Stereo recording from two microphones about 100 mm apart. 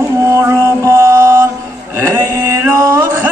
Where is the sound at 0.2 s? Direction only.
30° right (ahead or behind).